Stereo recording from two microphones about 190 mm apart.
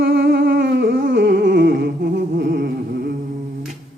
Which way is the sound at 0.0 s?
75° right (ahead or behind).